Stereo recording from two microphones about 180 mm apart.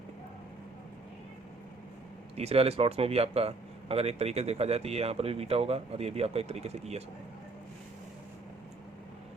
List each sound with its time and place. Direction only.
2.3 s speech: 35° right (ahead or behind)